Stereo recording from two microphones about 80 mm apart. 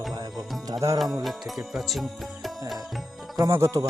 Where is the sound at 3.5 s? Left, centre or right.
Right.